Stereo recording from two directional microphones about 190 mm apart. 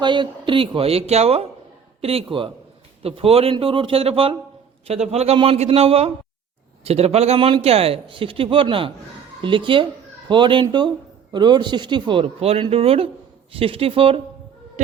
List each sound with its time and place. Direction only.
0.0 s a man's voice: 25° right (ahead or behind)